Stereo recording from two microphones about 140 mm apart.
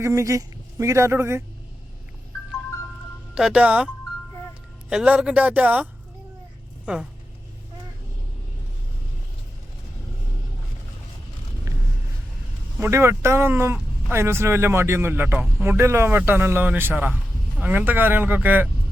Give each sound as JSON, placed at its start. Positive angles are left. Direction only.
{"t": 0.0, "sound": "a man's voice", "side_deg": -20}
{"t": 3.3, "sound": "speech", "side_deg": -5}
{"t": 4.9, "sound": "speech", "side_deg": -10}
{"t": 12.8, "sound": "speech", "side_deg": -20}